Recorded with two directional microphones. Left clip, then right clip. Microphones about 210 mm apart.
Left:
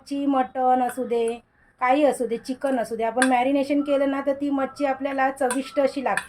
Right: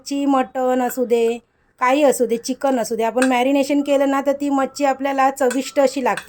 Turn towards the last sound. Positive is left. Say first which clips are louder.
# right 5 dB
turn(degrees=-55)  # may be behind; listen again after turning